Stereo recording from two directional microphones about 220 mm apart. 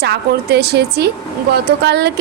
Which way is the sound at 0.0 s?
50° right (ahead or behind).